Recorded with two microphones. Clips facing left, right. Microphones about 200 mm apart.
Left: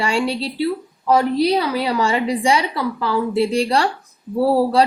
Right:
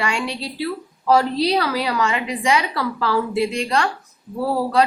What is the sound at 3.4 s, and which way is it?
Speech, 30° left (ahead or behind).